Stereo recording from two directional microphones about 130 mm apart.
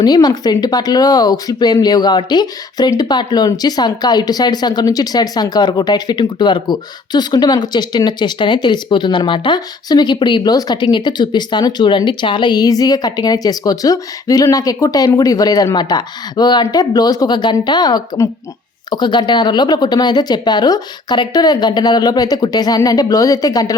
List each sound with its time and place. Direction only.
0.0 s speech: 30° left (ahead or behind)